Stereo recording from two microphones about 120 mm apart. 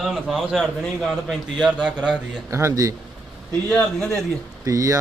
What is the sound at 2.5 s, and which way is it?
Speech, 25° right (ahead or behind).